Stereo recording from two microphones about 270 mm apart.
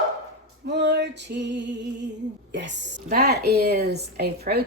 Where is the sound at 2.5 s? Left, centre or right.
Right.